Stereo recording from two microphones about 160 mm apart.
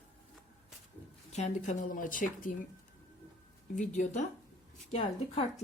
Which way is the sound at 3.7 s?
50° left (ahead or behind).